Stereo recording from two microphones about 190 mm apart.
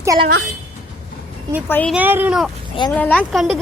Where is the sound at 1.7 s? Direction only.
10° left (ahead or behind).